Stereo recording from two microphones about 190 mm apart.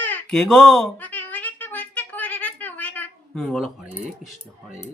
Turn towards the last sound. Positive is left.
turn(degrees=0)  # may be behind; listen again after turning